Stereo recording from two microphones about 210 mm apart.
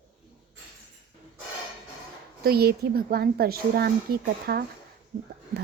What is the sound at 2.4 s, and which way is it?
A woman's voice, 50° right (ahead or behind).